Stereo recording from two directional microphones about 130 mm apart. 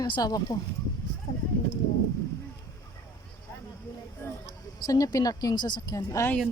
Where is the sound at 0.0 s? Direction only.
30° left (ahead or behind).